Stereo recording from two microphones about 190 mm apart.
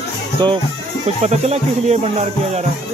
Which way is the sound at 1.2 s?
35° right (ahead or behind).